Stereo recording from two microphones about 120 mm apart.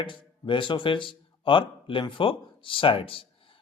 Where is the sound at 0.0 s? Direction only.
45° left (ahead or behind).